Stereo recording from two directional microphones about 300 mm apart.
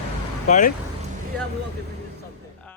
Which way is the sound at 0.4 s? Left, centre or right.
Left.